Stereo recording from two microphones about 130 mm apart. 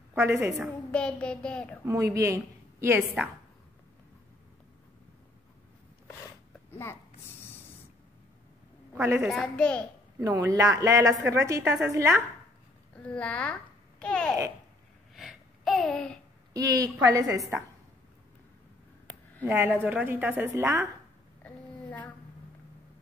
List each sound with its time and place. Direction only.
0.1 s a woman's voice: 20° right (ahead or behind)
0.9 s speech: 5° left (ahead or behind)
1.9 s a woman's voice: 25° right (ahead or behind)
6.7 s a sound: 20° left (ahead or behind)
8.9 s a woman's voice: 20° right (ahead or behind)
9.3 s speech: 5° left (ahead or behind)
10.2 s a woman's voice: 25° right (ahead or behind)
12.9 s a child's voice: 10° left (ahead or behind)
15.1 s a sound: centre (ahead or behind)
16.5 s a woman's voice: 25° right (ahead or behind)
19.4 s a woman's voice: 15° right (ahead or behind)